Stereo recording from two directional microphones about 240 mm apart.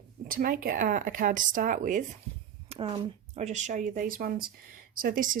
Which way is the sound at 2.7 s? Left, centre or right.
Right.